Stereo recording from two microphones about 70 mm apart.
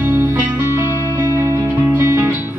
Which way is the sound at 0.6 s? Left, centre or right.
Right.